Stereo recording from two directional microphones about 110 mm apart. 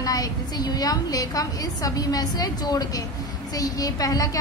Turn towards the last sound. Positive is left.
turn(degrees=30)  # may be behind; listen again after turning